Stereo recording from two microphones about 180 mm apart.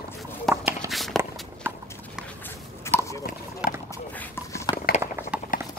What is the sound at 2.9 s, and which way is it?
Chopping, 15° left (ahead or behind).